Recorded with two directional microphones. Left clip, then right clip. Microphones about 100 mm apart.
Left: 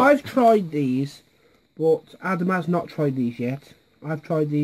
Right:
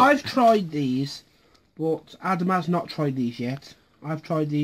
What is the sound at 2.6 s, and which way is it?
Speech, 35° left (ahead or behind).